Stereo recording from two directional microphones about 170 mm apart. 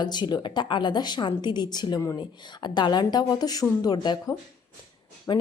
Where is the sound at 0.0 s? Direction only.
25° left (ahead or behind).